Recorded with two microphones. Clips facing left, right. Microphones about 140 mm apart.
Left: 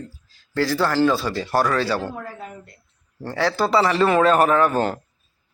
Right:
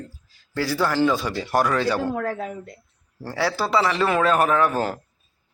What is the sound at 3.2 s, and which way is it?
A man's voice, 10° right (ahead or behind).